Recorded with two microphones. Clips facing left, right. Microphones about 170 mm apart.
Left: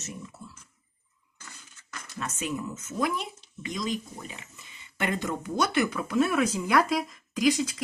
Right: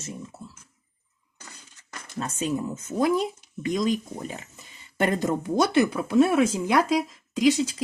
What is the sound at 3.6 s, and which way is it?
Speech, 50° right (ahead or behind).